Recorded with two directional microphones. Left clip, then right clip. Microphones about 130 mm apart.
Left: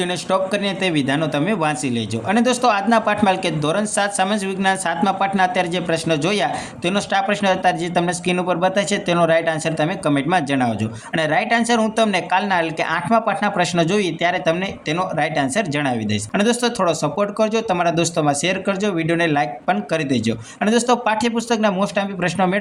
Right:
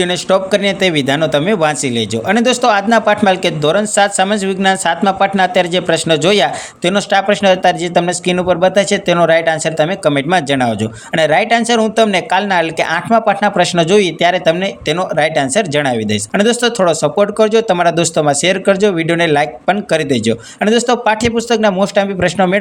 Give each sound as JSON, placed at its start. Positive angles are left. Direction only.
{"t": 0.0, "sound": "speech", "side_deg": -45}